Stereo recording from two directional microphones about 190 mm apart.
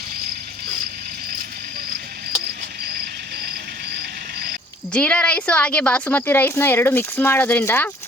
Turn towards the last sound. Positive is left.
turn(degrees=10)  # may be behind; listen again after turning